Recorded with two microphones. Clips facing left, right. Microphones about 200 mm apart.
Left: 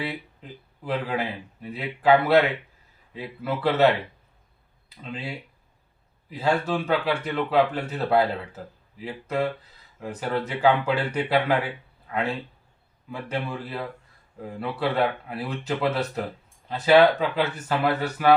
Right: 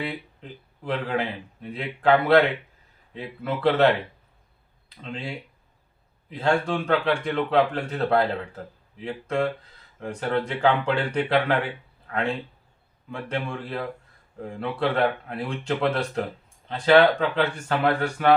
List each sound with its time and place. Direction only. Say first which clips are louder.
0.9 s a man's voice: right 1 dB; 5° left (ahead or behind)
5.0 s a man's voice: right 1 dB; 5° left (ahead or behind)
13.1 s a man's voice: even; 5° left (ahead or behind)